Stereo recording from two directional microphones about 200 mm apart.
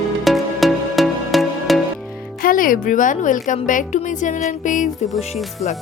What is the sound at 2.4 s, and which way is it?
A woman's voice, 45° left (ahead or behind).